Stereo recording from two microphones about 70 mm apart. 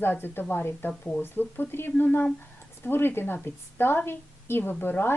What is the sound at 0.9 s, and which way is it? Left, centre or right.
Speech, centre.